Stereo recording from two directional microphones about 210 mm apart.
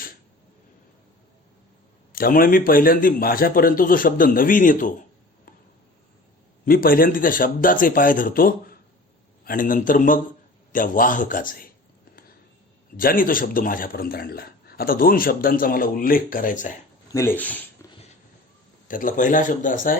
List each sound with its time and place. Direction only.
2.1 s a man's voice: 45° left (ahead or behind)
6.7 s a man's voice: 45° left (ahead or behind)
13.0 s a man's voice: 40° left (ahead or behind)
17.1 s speech: 10° left (ahead or behind)
18.9 s a man's voice: 40° left (ahead or behind)